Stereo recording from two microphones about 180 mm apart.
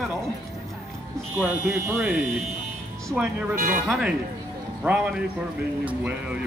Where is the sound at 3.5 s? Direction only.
45° right (ahead or behind).